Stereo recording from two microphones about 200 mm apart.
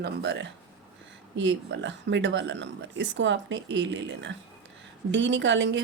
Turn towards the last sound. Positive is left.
turn(degrees=-65)  # may be behind; listen again after turning